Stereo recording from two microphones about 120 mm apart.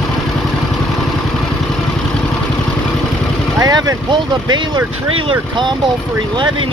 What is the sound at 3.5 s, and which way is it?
Vehicle, 30° right (ahead or behind).